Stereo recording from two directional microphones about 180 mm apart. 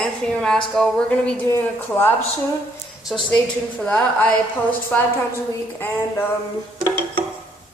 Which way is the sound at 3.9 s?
5° left (ahead or behind).